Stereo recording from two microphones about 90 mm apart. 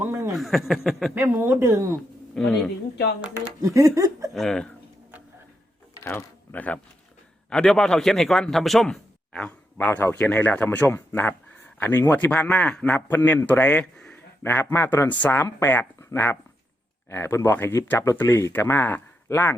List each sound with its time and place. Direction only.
0.0 s a sound: 30° right (ahead or behind)
0.3 s a man's voice: centre (ahead or behind)
1.3 s speech: 25° right (ahead or behind)
2.3 s a man's voice: 5° left (ahead or behind)
3.8 s speech: 40° right (ahead or behind)
4.4 s a man's voice: 5° left (ahead or behind)
5.9 s a sound: 35° left (ahead or behind)
6.5 s speech: 20° left (ahead or behind)
7.5 s a man's voice: 10° left (ahead or behind)
14.4 s speech: 25° left (ahead or behind)